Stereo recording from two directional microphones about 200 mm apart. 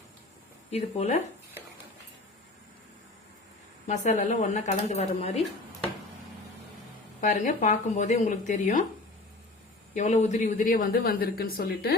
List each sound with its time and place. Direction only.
0.7 s speech: 35° left (ahead or behind)
3.8 s speech: 35° left (ahead or behind)
7.2 s speech: 40° left (ahead or behind)
9.9 s a woman's voice: 35° left (ahead or behind); by 11.9 s 50° left (ahead or behind)